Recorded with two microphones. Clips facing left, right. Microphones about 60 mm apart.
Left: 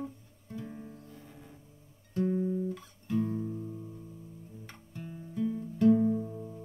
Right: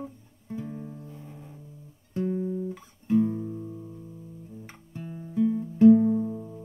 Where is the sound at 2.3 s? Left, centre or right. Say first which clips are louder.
Right 1 dB; centre.